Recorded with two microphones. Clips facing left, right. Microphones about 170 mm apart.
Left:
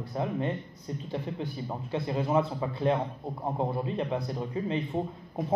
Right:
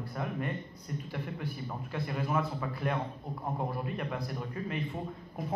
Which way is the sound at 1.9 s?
25° left (ahead or behind).